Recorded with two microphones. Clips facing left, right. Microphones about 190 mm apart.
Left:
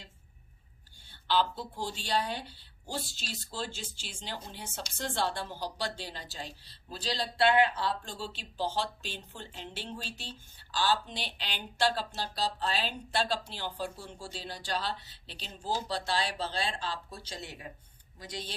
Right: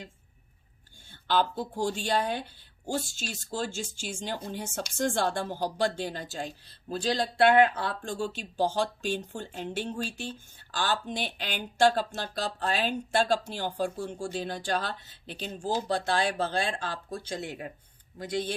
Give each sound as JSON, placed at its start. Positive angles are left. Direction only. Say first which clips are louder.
{"t": 1.3, "sound": "speech", "louder": "right 3 dB", "side_deg": -50}